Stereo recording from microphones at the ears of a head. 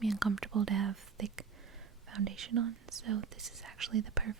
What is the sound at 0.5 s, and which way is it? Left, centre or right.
Whispering, right.